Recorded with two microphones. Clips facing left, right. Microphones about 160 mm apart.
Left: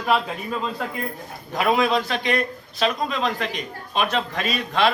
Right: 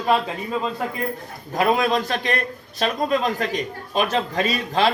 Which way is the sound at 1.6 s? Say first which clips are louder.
Right 1 dB; 40° right (ahead or behind).